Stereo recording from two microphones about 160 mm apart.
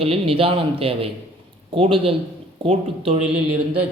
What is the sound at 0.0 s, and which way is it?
Speech, 35° right (ahead or behind).